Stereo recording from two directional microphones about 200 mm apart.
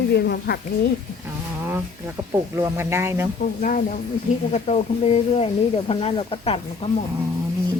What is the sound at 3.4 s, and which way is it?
Speech, 40° left (ahead or behind).